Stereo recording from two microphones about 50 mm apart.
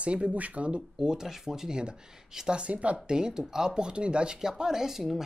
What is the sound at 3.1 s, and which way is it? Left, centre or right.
Speech, centre.